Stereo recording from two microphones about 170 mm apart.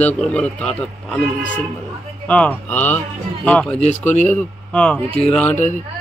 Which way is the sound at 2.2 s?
10° left (ahead or behind).